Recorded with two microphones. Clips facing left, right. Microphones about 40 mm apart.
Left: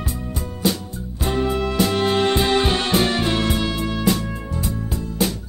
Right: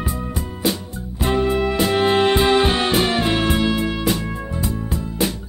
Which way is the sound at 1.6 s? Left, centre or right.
Centre.